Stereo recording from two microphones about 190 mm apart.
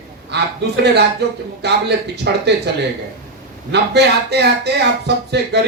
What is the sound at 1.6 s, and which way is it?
Speech, 60° right (ahead or behind).